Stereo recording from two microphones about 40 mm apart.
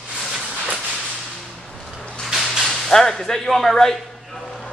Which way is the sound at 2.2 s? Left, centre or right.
Centre.